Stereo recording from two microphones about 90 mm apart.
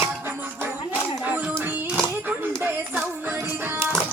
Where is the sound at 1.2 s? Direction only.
20° right (ahead or behind).